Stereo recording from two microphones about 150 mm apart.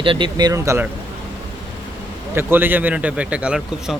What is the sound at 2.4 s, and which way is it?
Speech, 15° right (ahead or behind).